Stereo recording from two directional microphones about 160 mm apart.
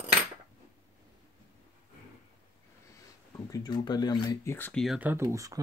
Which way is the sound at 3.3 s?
25° left (ahead or behind).